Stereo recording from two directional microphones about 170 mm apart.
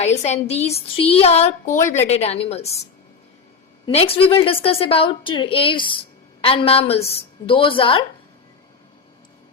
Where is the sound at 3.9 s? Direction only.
35° left (ahead or behind).